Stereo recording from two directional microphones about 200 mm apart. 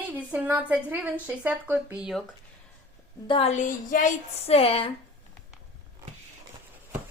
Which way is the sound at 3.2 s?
30° left (ahead or behind).